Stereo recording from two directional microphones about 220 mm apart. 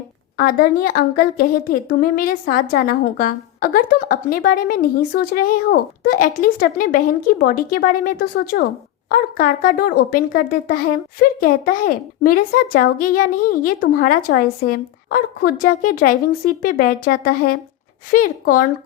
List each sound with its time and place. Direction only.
0.3 s a woman's voice: 45° left (ahead or behind)